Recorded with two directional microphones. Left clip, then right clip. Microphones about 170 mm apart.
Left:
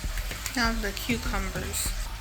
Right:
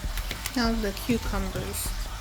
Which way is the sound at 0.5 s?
30° right (ahead or behind).